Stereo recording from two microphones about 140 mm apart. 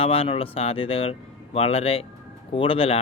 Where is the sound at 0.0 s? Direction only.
40° left (ahead or behind).